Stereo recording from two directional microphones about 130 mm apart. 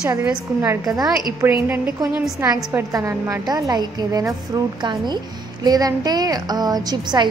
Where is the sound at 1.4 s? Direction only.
15° right (ahead or behind).